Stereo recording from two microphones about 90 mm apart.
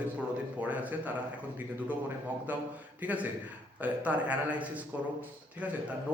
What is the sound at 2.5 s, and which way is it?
A man's voice, 20° right (ahead or behind).